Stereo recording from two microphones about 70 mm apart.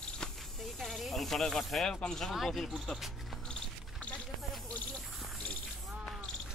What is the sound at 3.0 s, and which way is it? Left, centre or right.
Cricket, centre.